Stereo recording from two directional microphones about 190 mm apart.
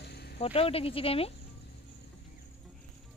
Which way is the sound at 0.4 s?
30° left (ahead or behind).